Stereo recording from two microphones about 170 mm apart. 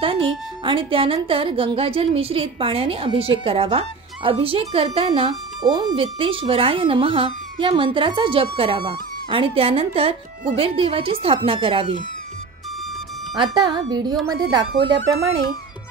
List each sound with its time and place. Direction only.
0.0 s music: 30° right (ahead or behind)
0.7 s a woman's voice: 30° right (ahead or behind)
13.4 s speech: 25° right (ahead or behind)